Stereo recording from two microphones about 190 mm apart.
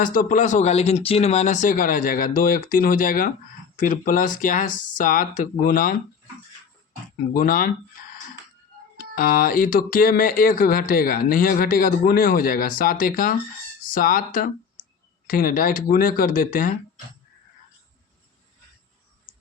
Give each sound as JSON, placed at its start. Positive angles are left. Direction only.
{"t": 0.0, "sound": "speech", "side_deg": 45}
{"t": 7.3, "sound": "speech", "side_deg": 45}
{"t": 9.0, "sound": "speech", "side_deg": 50}